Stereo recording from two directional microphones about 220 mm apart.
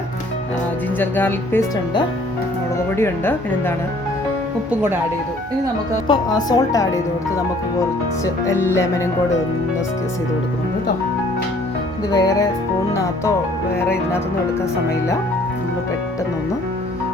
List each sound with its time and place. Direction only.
0.9 s a woman's voice: 10° left (ahead or behind)
2.9 s a woman's voice: 10° left (ahead or behind)
6.1 s a woman's voice: 20° left (ahead or behind)
8.2 s a woman's voice: 10° left (ahead or behind)
12.1 s a woman's voice: 15° left (ahead or behind)